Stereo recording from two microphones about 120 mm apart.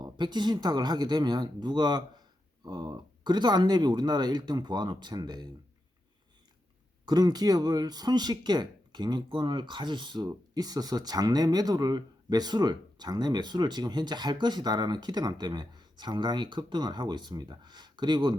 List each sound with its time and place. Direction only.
0.0 s speech: 40° right (ahead or behind)
7.0 s speech: 35° right (ahead or behind)